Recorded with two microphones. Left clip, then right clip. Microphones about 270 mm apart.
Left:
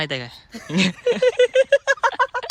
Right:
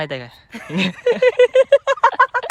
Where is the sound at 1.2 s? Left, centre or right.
Right.